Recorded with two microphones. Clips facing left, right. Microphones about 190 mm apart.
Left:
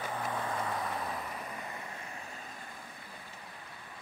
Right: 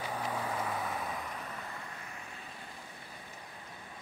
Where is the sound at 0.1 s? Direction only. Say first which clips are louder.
Even; 10° right (ahead or behind).